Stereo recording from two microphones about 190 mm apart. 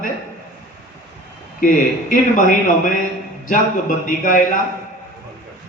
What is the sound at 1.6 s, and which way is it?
A man's voice, 45° left (ahead or behind).